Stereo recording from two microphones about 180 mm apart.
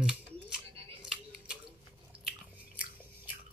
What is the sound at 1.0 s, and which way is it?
Scissors, 5° right (ahead or behind).